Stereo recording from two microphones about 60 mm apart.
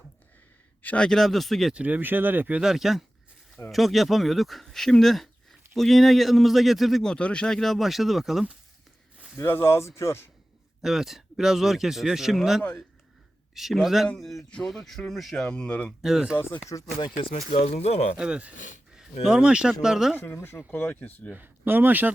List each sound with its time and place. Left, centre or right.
0.9 s speech: centre
1.7 s speech: right
2.6 s speech: centre
7.0 s speech: centre
9.4 s speech: left
10.8 s speech: centre
14.5 s speech: centre
15.4 s speech: centre
16.0 s speech: centre
16.6 s speech: left
18.2 s speech: centre
20.1 s speech: left
20.7 s speech: left
21.3 s speech: right